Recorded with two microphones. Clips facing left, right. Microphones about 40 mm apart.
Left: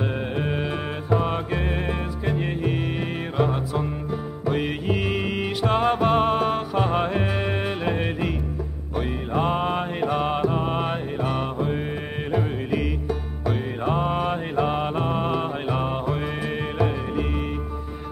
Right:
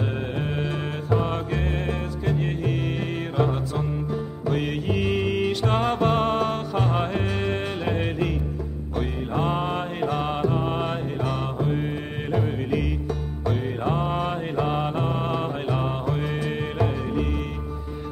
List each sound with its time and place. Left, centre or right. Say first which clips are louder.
1.2 s music: left 1 dB; centre
4.5 s music: left 1 dB; centre
9.3 s mantra: left 3 dB; centre
12.3 s music: even; centre